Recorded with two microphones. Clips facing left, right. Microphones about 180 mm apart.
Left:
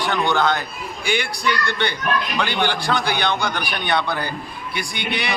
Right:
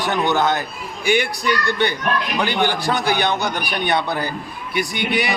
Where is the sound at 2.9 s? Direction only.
45° right (ahead or behind).